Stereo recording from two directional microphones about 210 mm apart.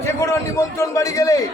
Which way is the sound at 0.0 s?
15° left (ahead or behind).